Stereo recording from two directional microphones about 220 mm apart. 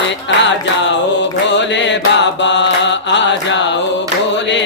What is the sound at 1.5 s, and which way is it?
Mantra, 55° left (ahead or behind).